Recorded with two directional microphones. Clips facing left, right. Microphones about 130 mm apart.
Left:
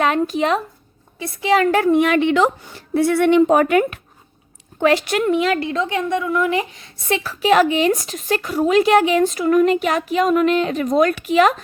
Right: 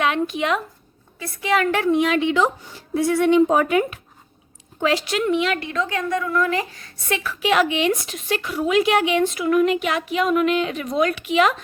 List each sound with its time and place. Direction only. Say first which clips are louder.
0.0 s a woman's voice: left 4 dB; 40° left (ahead or behind)